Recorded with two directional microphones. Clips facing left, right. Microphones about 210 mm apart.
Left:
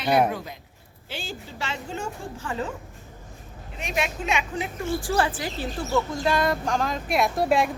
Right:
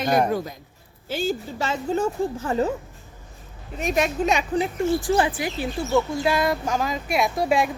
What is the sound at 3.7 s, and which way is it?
Speech, 40° right (ahead or behind).